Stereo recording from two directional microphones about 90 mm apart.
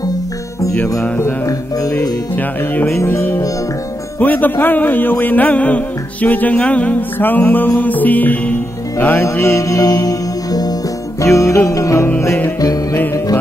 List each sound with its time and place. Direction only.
1.0 s music: 20° left (ahead or behind)
1.8 s music: 40° left (ahead or behind)
2.3 s music: 20° left (ahead or behind)
9.6 s music: 40° left (ahead or behind)